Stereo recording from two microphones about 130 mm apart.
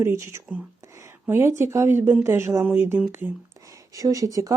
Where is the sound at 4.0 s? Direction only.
25° right (ahead or behind).